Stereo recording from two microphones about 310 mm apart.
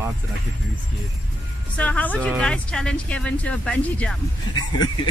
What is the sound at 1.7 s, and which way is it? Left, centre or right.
A woman's voice, centre.